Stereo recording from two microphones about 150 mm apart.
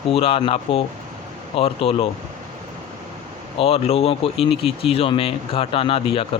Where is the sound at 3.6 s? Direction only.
40° left (ahead or behind).